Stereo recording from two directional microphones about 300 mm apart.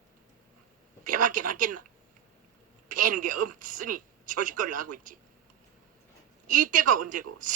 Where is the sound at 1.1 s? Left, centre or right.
Right.